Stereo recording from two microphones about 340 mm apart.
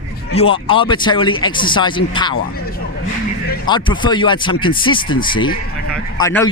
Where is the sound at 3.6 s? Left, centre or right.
Centre.